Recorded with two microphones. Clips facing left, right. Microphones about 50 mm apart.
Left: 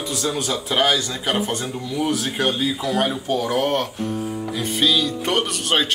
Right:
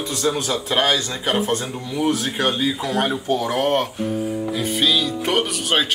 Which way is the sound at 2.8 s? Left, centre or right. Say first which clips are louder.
Even; right.